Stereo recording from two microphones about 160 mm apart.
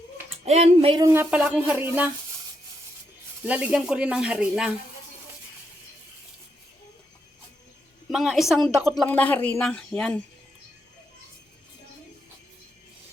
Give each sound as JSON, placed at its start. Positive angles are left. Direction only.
{"t": 0.4, "sound": "speech", "side_deg": -40}
{"t": 1.0, "sound": "speech", "side_deg": -15}
{"t": 3.4, "sound": "speech", "side_deg": -10}
{"t": 8.1, "sound": "speech", "side_deg": 0}
{"t": 9.0, "sound": "a woman's voice", "side_deg": 10}